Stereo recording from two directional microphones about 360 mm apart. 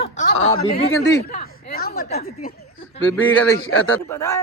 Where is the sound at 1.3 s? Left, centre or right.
Left.